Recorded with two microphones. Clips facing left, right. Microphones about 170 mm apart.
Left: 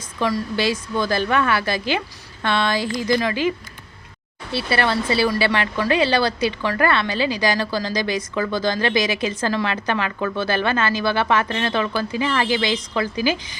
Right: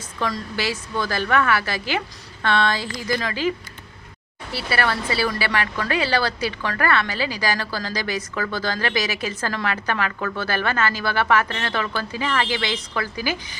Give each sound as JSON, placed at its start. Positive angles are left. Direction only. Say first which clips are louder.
{"t": 0.9, "sound": "speech", "louder": "even", "side_deg": 15}
{"t": 2.4, "sound": "a woman's voice", "louder": "left 1 dB", "side_deg": 15}
{"t": 4.5, "sound": "a woman's voice", "louder": "left 3 dB", "side_deg": 25}